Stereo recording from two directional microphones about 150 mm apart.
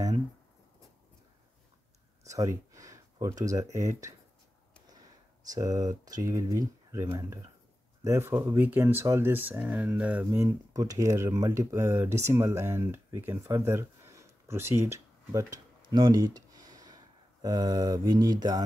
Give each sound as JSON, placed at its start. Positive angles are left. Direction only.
{"t": 2.2, "sound": "a sound", "side_deg": -20}
{"t": 3.7, "sound": "speech", "side_deg": -20}
{"t": 5.5, "sound": "speech", "side_deg": -25}